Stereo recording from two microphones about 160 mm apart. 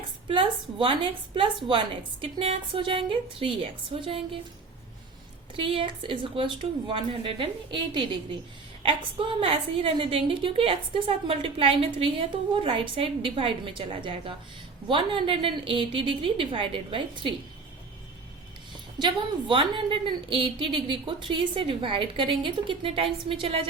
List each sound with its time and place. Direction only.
0.3 s a woman's voice: 30° right (ahead or behind)
5.5 s a woman's voice: 35° right (ahead or behind)
18.9 s a woman's voice: 30° right (ahead or behind)